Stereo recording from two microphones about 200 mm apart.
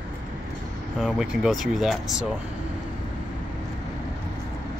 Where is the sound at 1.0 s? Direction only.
Centre (ahead or behind).